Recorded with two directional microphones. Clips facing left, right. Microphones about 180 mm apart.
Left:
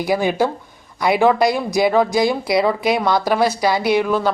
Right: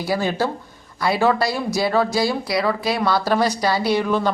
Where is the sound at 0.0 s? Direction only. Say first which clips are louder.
Left 4 dB; 15° left (ahead or behind).